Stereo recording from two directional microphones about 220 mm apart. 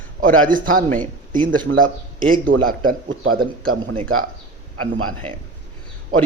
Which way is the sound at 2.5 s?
40° right (ahead or behind).